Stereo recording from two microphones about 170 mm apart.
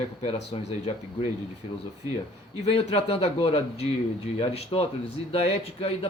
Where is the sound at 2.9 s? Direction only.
35° left (ahead or behind).